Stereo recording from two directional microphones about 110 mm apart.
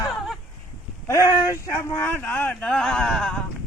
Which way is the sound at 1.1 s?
25° left (ahead or behind).